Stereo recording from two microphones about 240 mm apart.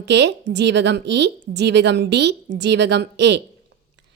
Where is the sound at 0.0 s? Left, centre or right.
Right.